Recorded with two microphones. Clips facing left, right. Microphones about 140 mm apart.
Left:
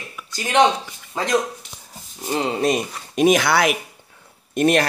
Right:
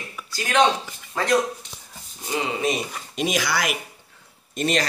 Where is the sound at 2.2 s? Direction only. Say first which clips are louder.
Left 4 dB; 40° left (ahead or behind).